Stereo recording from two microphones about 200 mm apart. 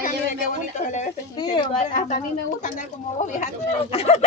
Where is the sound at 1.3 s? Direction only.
20° left (ahead or behind).